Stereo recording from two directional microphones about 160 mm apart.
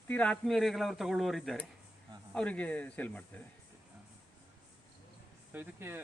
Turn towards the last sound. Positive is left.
turn(degrees=-10)  # may be behind; listen again after turning